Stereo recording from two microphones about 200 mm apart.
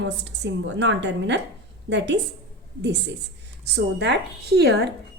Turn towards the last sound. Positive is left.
turn(degrees=-55)  # may be behind; listen again after turning